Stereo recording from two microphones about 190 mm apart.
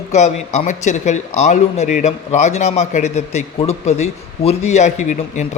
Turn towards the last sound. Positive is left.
turn(degrees=40)  # may be behind; listen again after turning